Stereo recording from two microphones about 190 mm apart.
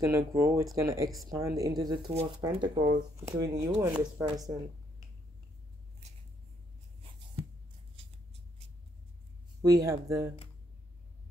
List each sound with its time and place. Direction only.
0.0 s speech: 15° right (ahead or behind)
9.6 s speech: 20° right (ahead or behind)